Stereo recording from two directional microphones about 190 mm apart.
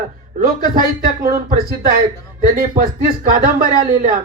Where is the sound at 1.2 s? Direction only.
50° right (ahead or behind).